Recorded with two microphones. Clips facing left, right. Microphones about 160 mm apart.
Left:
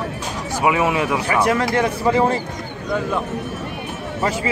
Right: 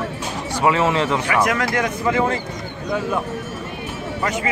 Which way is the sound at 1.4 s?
30° left (ahead or behind).